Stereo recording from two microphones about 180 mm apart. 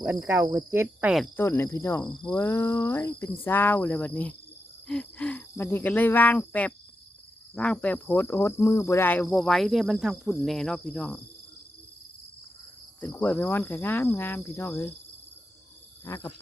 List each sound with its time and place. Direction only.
0.0 s cricket: 10° right (ahead or behind)
1.4 s speech: 15° left (ahead or behind)
7.5 s cricket: 5° left (ahead or behind)
13.0 s speech: 10° left (ahead or behind)
16.0 s speech: 15° left (ahead or behind)